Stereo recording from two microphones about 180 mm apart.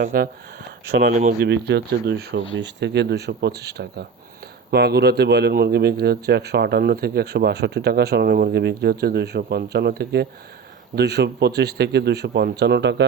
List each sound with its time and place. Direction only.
0.0 s speech: 55° right (ahead or behind); by 13.1 s 70° right (ahead or behind)